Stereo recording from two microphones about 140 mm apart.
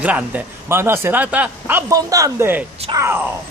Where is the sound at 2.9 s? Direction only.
40° right (ahead or behind).